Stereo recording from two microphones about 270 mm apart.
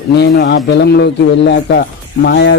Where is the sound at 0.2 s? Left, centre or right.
Left.